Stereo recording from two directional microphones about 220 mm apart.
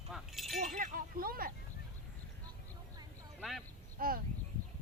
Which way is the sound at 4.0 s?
40° right (ahead or behind).